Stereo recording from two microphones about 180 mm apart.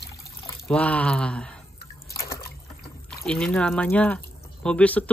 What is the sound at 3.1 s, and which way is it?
Speech, 5° left (ahead or behind).